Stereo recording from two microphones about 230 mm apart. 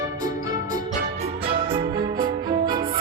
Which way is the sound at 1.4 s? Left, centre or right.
Right.